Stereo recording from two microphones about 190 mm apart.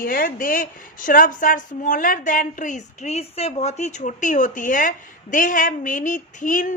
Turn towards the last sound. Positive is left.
turn(degrees=40)  # may be behind; listen again after turning